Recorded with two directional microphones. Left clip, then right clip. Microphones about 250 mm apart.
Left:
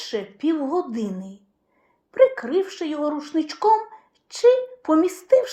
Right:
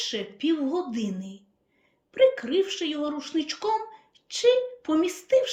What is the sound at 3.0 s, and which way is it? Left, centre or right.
A woman's voice, centre.